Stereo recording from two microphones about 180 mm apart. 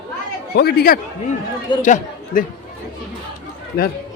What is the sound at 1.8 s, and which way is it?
Speech, 45° left (ahead or behind).